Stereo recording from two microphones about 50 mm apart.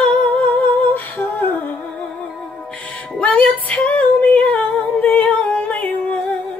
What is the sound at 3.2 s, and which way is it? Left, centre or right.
Female singing, left.